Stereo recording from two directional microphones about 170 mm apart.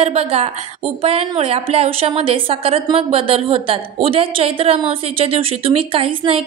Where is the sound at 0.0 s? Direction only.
35° right (ahead or behind).